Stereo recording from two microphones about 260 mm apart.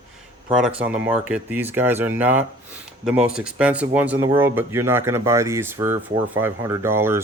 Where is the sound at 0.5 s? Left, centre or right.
Centre.